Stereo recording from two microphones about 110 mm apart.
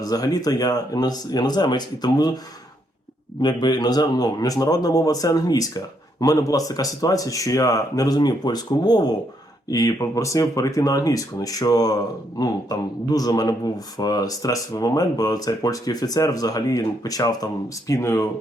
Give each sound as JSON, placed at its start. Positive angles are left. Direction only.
{"t": 0.0, "sound": "speech", "side_deg": 35}
{"t": 3.4, "sound": "speech", "side_deg": 40}